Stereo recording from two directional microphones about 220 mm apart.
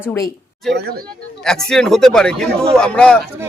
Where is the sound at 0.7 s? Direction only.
45° right (ahead or behind).